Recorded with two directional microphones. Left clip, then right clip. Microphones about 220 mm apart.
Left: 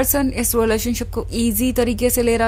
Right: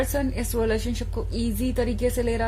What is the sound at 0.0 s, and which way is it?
Speech, 30° left (ahead or behind).